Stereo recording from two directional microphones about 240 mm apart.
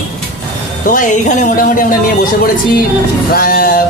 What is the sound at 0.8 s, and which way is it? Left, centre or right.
Speech, left.